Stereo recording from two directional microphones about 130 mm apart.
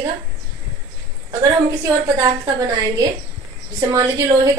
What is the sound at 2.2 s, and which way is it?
A woman's voice, 30° right (ahead or behind).